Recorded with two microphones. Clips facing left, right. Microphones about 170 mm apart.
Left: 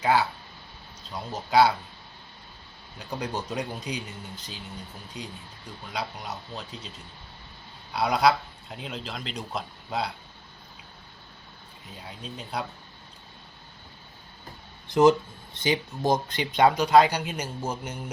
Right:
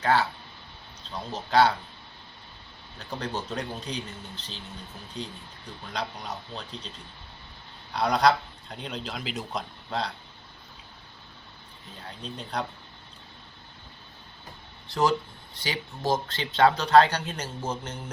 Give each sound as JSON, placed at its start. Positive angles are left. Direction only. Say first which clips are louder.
{"t": 0.0, "sound": "speech", "louder": "left 1 dB", "side_deg": 10}
{"t": 3.0, "sound": "speech", "louder": "left 1 dB", "side_deg": 10}
{"t": 7.9, "sound": "speech", "louder": "even", "side_deg": 5}
{"t": 12.0, "sound": "speech", "louder": "right 1 dB", "side_deg": 5}
{"t": 14.8, "sound": "speech", "louder": "left 6 dB", "side_deg": 20}